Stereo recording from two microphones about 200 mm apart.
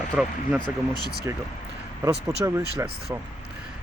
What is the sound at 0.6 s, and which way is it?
Speech, 20° left (ahead or behind).